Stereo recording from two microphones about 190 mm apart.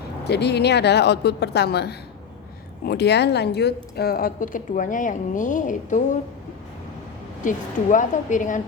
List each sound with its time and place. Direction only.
0.3 s a woman's voice: 60° left (ahead or behind); by 6.1 s 40° left (ahead or behind)
7.4 s a woman's voice: 40° left (ahead or behind)